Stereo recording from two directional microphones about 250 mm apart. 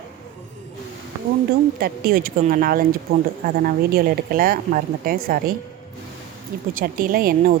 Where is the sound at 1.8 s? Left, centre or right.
Right.